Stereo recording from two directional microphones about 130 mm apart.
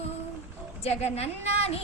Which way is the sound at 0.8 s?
55° left (ahead or behind).